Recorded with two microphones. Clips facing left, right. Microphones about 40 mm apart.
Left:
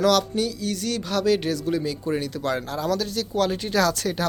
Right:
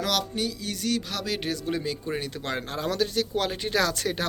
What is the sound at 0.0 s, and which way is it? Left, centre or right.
Speech, centre.